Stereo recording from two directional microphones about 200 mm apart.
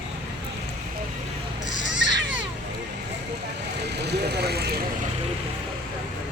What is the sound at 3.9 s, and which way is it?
Vehicle, 55° right (ahead or behind).